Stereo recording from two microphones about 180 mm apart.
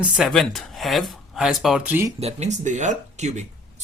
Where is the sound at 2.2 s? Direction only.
35° right (ahead or behind).